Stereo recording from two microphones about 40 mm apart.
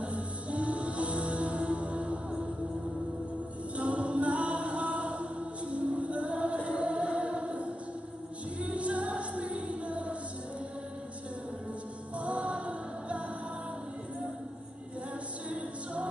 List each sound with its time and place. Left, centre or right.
0.0 s music: right
3.7 s a capella: right
8.5 s music: right
12.2 s music: right
15.5 s music: right